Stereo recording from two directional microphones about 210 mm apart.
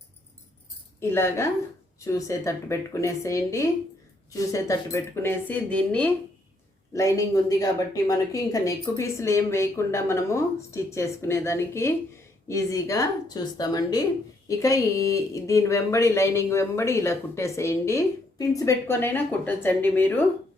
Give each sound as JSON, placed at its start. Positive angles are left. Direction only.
{"t": 0.9, "sound": "speech", "side_deg": 10}